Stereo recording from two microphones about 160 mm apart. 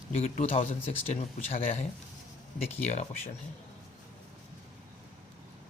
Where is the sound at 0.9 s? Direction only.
40° left (ahead or behind).